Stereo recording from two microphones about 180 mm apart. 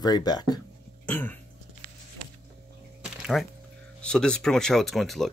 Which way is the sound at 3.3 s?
Centre (ahead or behind).